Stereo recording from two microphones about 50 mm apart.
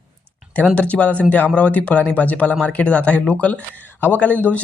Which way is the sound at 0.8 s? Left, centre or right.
Left.